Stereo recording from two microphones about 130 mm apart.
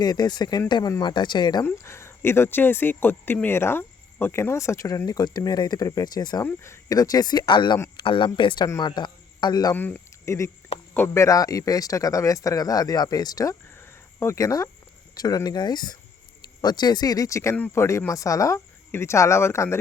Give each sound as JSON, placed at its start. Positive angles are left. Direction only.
{"t": 0.0, "sound": "speech", "side_deg": 30}
{"t": 1.6, "sound": "speech", "side_deg": 20}
{"t": 6.4, "sound": "a man's voice", "side_deg": 20}
{"t": 9.7, "sound": "speech", "side_deg": 15}